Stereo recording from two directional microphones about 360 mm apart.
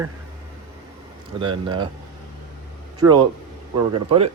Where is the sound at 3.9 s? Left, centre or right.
Centre.